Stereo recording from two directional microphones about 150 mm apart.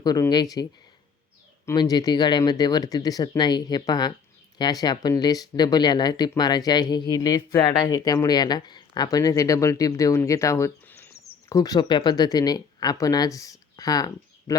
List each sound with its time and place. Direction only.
0.0 s speech: 25° left (ahead or behind)